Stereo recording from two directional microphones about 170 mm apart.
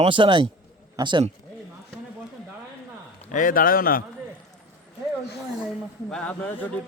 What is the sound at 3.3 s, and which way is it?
Speech, 50° left (ahead or behind).